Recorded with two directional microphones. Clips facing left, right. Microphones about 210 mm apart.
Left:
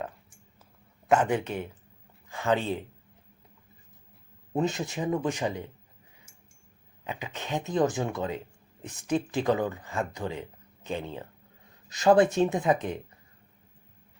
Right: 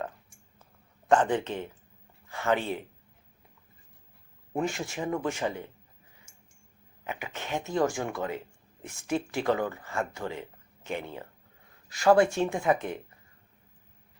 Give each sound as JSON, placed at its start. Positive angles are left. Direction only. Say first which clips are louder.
{"t": 1.0, "sound": "speech", "louder": "even", "side_deg": 10}
{"t": 4.5, "sound": "speech", "louder": "left 2 dB", "side_deg": 20}
{"t": 7.0, "sound": "speech", "louder": "even", "side_deg": 15}